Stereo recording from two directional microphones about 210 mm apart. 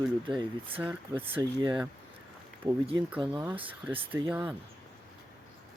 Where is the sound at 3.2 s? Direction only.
20° right (ahead or behind).